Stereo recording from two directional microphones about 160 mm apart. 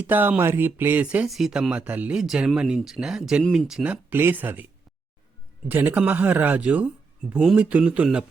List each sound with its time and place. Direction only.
0.1 s speech: 10° right (ahead or behind)
5.6 s speech: 10° right (ahead or behind)